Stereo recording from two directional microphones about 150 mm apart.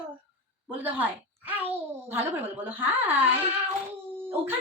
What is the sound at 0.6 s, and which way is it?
Speech, 10° right (ahead or behind).